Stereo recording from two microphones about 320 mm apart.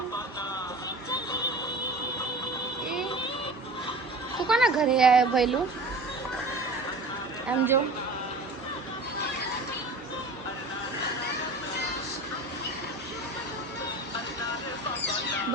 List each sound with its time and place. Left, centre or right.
4.4 s speech: centre
7.4 s speech: centre